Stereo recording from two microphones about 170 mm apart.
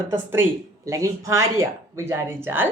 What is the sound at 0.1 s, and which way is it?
Speech, 15° right (ahead or behind).